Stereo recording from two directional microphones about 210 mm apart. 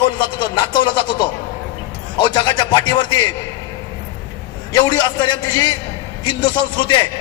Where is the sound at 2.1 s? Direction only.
20° left (ahead or behind).